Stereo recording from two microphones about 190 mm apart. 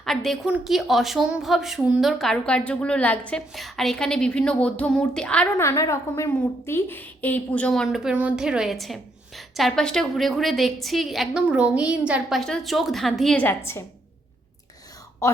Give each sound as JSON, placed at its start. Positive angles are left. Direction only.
{"t": 0.0, "sound": "a woman's voice", "side_deg": 0}
{"t": 15.2, "sound": "speech", "side_deg": 15}